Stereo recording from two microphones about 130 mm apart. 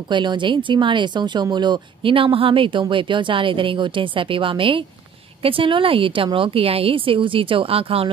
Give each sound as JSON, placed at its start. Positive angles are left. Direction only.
{"t": 0.1, "sound": "a woman's voice", "side_deg": -35}